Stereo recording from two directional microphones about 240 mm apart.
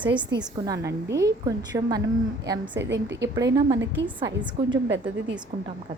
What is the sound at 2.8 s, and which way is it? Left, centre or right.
Speech, right.